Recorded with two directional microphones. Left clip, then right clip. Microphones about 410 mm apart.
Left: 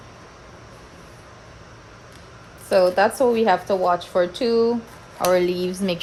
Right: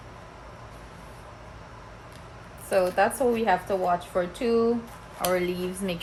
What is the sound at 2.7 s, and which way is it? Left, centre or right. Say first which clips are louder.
Speech: left 6 dB; left.